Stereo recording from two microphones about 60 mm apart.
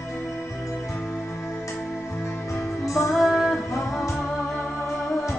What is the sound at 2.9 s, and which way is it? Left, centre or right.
Music, left.